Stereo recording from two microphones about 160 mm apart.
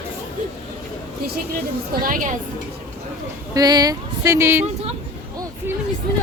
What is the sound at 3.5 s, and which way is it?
Speech, 25° right (ahead or behind).